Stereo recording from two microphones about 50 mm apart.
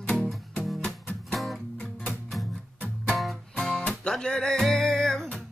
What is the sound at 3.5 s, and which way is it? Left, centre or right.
Music, centre.